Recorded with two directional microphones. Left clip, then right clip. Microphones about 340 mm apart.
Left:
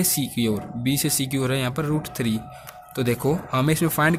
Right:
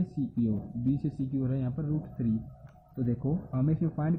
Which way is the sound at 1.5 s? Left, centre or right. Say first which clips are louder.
Left 11 dB; left.